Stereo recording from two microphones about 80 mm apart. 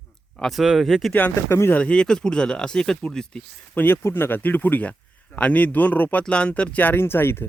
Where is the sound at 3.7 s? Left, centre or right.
Left.